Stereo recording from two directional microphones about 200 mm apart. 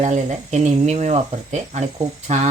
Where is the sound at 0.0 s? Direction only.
35° right (ahead or behind).